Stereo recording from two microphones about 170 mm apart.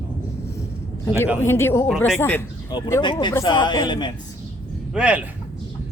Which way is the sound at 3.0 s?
30° left (ahead or behind).